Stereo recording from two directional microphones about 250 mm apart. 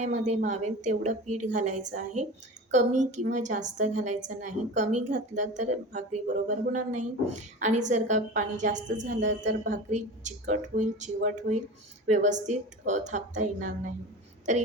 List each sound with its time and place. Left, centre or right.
0.0 s a woman's voice: right